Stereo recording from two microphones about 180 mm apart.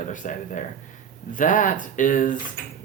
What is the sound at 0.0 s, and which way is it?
Speech, 45° left (ahead or behind).